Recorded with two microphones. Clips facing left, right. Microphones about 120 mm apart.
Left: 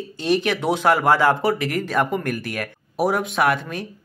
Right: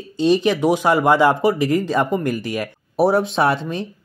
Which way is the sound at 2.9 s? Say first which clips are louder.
Right 4 dB; 30° right (ahead or behind).